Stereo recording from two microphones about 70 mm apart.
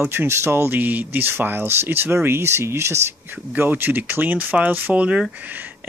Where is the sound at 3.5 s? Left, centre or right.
Right.